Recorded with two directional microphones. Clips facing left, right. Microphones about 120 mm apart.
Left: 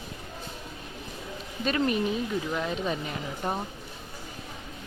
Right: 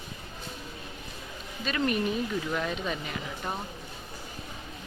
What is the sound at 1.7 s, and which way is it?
A woman's voice, 25° left (ahead or behind).